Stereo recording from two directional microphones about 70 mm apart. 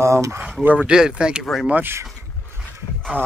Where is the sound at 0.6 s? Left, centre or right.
Right.